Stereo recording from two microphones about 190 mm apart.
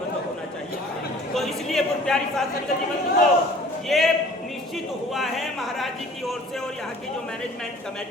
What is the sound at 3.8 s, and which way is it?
Speech, centre (ahead or behind).